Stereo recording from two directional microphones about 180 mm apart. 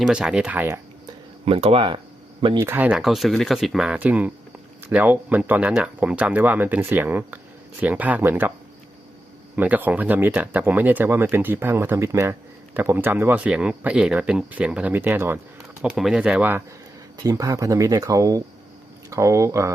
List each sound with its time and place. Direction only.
0.0 s speech: 5° right (ahead or behind)
1.5 s speech: 30° right (ahead or behind)
2.6 s speech: 10° right (ahead or behind)
9.6 s speech: 10° right (ahead or behind)